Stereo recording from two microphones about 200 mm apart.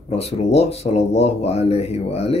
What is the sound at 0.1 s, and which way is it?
Speech, 30° left (ahead or behind).